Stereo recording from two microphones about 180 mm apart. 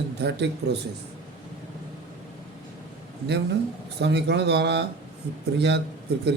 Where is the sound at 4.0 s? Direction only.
70° right (ahead or behind).